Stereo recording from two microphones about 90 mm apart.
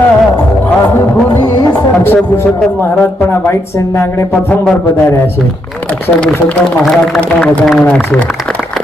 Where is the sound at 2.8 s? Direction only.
25° left (ahead or behind).